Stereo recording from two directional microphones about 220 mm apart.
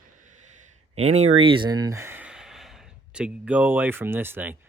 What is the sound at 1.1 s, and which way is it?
Speech, 30° right (ahead or behind).